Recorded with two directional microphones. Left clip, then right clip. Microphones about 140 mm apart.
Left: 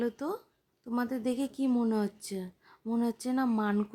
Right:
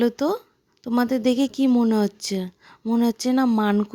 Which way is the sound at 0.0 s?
55° right (ahead or behind).